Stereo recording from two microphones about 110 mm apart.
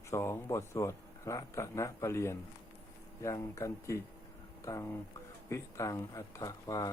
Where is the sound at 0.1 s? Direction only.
25° left (ahead or behind).